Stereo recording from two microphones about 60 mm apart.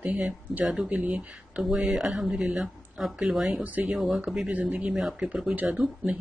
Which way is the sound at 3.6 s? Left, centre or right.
Right.